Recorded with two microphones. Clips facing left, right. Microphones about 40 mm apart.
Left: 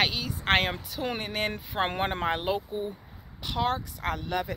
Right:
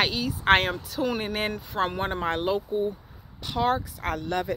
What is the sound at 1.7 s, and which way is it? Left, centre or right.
Speech, left.